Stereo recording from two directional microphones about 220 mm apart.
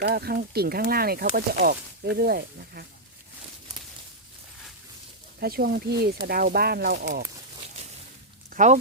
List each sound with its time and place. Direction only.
0.0 s speech: 45° right (ahead or behind)
5.4 s speech: 45° right (ahead or behind)
8.4 s speech: 35° right (ahead or behind)